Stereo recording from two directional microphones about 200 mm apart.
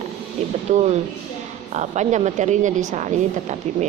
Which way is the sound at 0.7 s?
35° right (ahead or behind).